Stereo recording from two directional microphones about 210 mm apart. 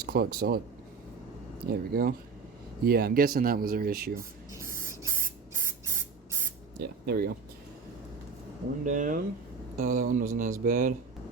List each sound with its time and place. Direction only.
0.0 s speech: 45° right (ahead or behind)
1.9 s speech: 45° right (ahead or behind)
4.5 s spray: 15° right (ahead or behind)
6.7 s speech: 50° right (ahead or behind)
8.8 s speech: 35° right (ahead or behind)